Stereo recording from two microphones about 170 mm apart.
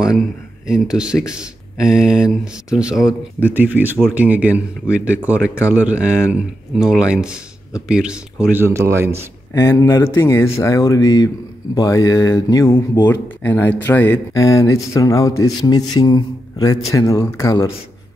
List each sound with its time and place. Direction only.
0.7 s speech: 5° right (ahead or behind)
9.5 s speech: 15° left (ahead or behind)